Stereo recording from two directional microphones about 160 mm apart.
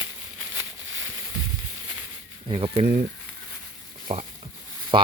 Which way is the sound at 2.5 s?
35° right (ahead or behind).